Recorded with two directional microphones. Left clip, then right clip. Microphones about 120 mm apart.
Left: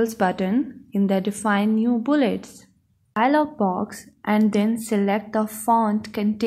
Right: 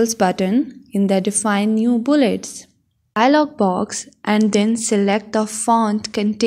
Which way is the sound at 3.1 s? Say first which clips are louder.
Right 5 dB; 50° right (ahead or behind).